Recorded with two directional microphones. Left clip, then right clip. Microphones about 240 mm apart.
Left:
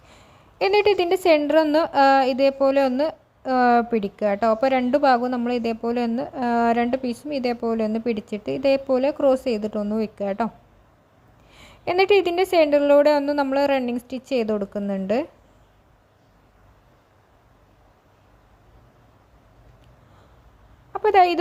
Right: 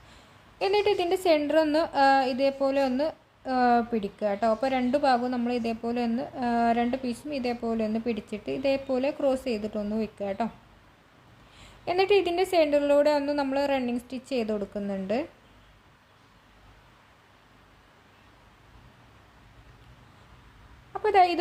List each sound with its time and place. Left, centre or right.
0.6 s speech: left
11.5 s speech: left
20.9 s a sound: left